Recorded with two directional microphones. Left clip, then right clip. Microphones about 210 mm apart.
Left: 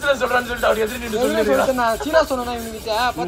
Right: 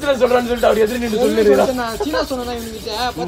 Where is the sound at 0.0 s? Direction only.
35° right (ahead or behind).